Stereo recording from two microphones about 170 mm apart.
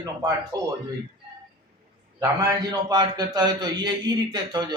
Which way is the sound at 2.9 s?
25° right (ahead or behind).